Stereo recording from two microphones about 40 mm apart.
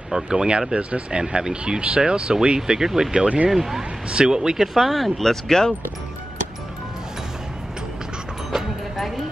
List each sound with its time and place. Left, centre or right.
0.1 s speech: centre
3.4 s speech: centre
4.1 s speech: centre
4.7 s speech: centre
8.9 s a sound: centre